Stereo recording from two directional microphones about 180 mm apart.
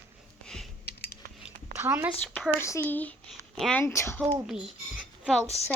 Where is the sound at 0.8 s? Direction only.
60° left (ahead or behind).